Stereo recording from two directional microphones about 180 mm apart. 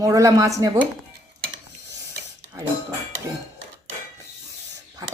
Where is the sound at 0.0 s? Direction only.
20° right (ahead or behind).